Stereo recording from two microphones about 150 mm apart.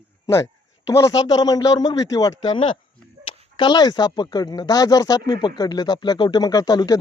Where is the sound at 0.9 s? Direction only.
20° left (ahead or behind).